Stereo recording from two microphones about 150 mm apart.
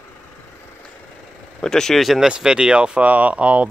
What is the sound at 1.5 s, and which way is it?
Speech, 5° left (ahead or behind).